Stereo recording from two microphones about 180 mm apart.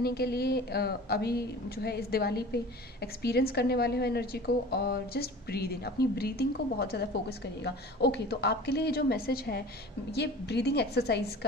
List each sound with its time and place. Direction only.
0.0 s a woman's voice: 60° left (ahead or behind)